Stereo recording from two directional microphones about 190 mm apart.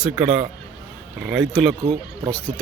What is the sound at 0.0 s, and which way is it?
Speech, 5° right (ahead or behind).